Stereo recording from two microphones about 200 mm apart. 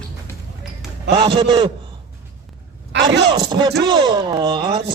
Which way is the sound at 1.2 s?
20° right (ahead or behind).